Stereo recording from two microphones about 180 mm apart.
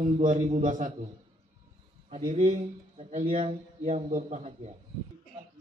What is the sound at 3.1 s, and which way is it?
A man's voice, 45° right (ahead or behind).